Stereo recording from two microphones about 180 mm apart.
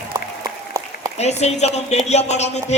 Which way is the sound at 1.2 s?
35° left (ahead or behind).